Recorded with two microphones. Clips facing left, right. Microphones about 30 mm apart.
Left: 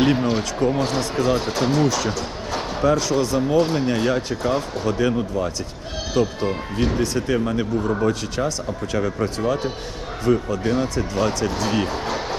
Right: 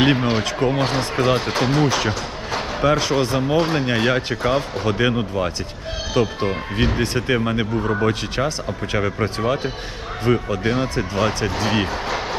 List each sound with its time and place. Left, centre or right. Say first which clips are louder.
0.0 s speech: right 1 dB; right